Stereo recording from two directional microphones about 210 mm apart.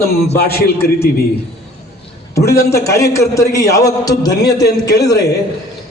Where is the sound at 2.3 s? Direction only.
15° left (ahead or behind).